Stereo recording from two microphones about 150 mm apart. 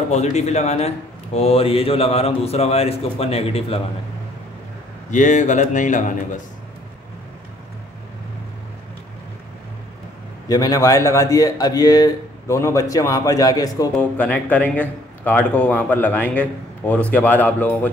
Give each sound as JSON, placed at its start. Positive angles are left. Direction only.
{"t": 0.1, "sound": "a man's voice", "side_deg": 45}
{"t": 5.1, "sound": "speech", "side_deg": 55}
{"t": 10.5, "sound": "a man's voice", "side_deg": 25}
{"t": 13.9, "sound": "speech", "side_deg": 10}